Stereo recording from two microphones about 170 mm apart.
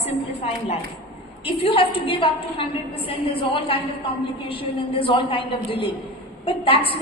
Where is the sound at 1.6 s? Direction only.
30° left (ahead or behind).